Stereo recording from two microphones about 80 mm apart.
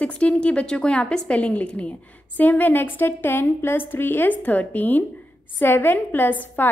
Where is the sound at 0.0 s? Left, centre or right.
Centre.